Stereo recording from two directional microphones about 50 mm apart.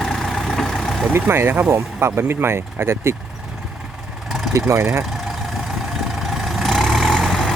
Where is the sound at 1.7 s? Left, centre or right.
Right.